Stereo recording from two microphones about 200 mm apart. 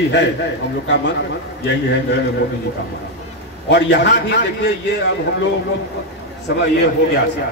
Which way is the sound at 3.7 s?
60° left (ahead or behind).